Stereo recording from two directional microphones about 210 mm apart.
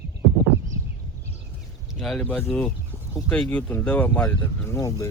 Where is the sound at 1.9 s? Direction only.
Centre (ahead or behind).